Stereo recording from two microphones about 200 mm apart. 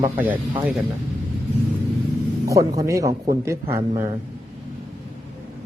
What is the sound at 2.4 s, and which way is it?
A man's voice, 15° right (ahead or behind).